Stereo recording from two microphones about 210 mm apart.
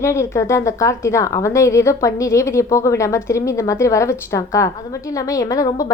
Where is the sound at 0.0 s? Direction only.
15° left (ahead or behind).